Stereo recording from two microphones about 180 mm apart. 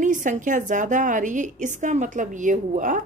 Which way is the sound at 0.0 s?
45° right (ahead or behind).